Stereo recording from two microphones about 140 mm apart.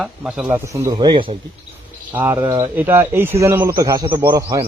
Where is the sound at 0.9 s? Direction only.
35° right (ahead or behind).